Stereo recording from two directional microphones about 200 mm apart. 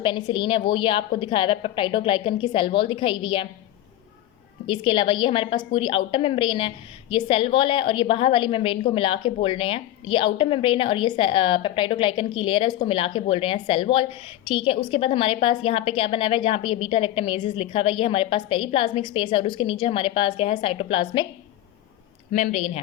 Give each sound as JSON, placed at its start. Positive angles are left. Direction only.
{"t": 0.0, "sound": "a woman's voice", "side_deg": 25}
{"t": 4.6, "sound": "a woman's voice", "side_deg": 25}
{"t": 22.3, "sound": "speech", "side_deg": 45}
{"t": 22.5, "sound": "a woman's voice", "side_deg": 30}